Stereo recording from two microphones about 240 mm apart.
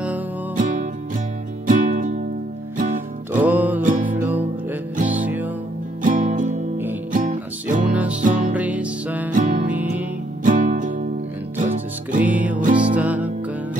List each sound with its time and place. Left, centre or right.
0.6 s music: right
3.4 s music: centre
6.0 s music: right
7.9 s music: centre
9.3 s music: right
9.7 s music: centre
10.4 s music: right
12.3 s music: centre